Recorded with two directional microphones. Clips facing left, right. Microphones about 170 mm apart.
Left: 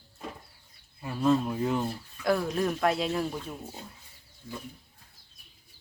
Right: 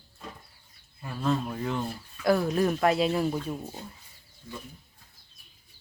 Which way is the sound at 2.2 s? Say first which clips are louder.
Right 3 dB; centre (ahead or behind).